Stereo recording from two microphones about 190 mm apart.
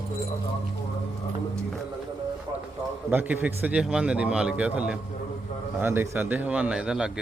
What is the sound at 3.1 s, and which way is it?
A man's voice, 10° right (ahead or behind).